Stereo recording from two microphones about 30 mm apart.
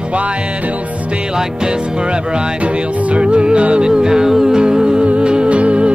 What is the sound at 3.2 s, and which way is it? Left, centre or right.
Music, right.